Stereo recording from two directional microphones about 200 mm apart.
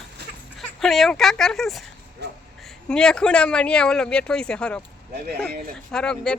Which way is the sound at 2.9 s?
5° left (ahead or behind).